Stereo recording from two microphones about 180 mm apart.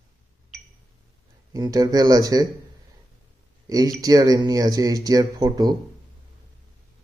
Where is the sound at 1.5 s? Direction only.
20° right (ahead or behind).